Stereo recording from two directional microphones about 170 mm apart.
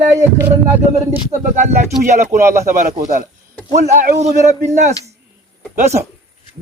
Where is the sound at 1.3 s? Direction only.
45° right (ahead or behind).